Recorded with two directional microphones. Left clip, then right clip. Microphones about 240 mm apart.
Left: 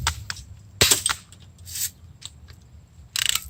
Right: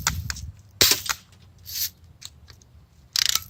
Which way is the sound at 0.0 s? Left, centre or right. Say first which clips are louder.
Even; right.